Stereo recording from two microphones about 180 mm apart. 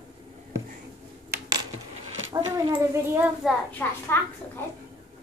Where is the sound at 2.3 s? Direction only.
25° right (ahead or behind).